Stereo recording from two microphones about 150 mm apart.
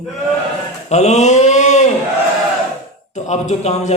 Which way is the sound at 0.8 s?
50° left (ahead or behind).